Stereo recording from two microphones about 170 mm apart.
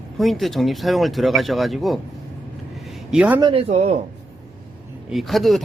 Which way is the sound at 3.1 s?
10° right (ahead or behind).